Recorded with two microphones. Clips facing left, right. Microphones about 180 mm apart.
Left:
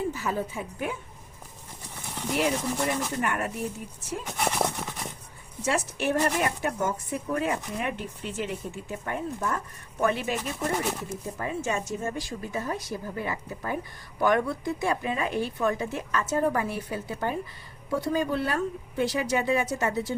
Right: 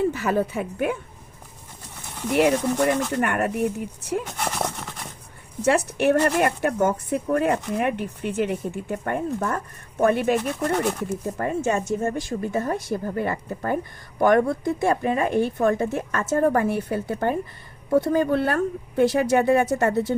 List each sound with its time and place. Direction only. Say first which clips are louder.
0.1 s speech: right 7 dB; 70° right (ahead or behind)
2.3 s speech: right 7 dB; 65° right (ahead or behind)
4.3 s horse: even; centre (ahead or behind)
5.6 s speech: right 8 dB; 60° right (ahead or behind)